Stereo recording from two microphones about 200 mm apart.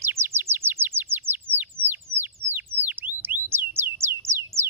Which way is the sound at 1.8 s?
10° right (ahead or behind).